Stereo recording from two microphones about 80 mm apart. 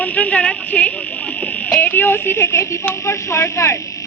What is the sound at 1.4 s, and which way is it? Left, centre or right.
Speech, centre.